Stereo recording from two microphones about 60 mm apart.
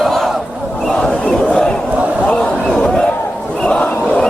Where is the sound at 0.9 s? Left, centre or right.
Centre.